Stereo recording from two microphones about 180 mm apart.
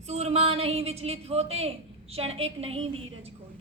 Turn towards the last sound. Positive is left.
turn(degrees=-30)  # may be behind; listen again after turning